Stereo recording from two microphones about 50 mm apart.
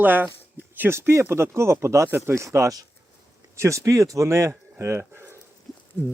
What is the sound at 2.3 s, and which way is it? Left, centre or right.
Speech, right.